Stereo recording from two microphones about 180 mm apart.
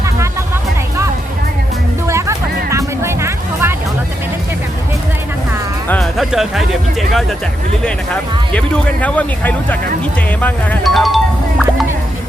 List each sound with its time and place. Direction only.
2.0 s music: 15° right (ahead or behind)
5.9 s music: centre (ahead or behind)
7.1 s speech: centre (ahead or behind)